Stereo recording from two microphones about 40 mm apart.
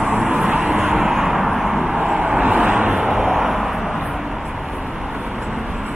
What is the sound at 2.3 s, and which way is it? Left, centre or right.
Vehicle, right.